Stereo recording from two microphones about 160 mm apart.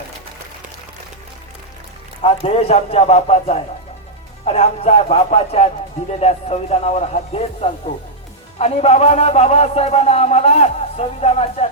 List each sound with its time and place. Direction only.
2.2 s a man's voice: 40° left (ahead or behind)